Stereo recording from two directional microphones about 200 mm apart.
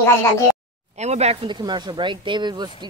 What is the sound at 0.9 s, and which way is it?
Speech, 35° right (ahead or behind).